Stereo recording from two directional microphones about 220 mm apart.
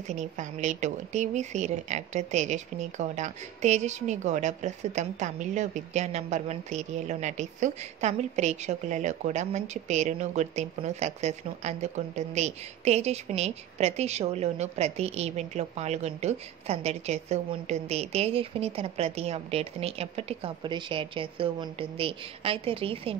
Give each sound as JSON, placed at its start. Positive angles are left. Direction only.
{"t": 0.0, "sound": "speech", "side_deg": -35}